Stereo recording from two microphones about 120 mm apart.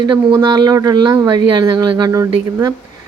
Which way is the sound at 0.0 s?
40° right (ahead or behind).